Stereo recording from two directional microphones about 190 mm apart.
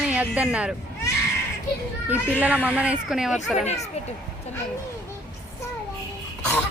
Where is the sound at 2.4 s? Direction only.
10° right (ahead or behind).